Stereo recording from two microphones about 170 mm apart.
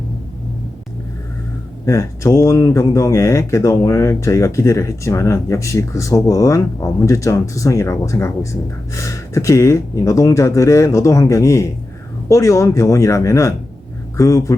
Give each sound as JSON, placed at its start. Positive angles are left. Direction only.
{"t": 1.8, "sound": "speech", "side_deg": 20}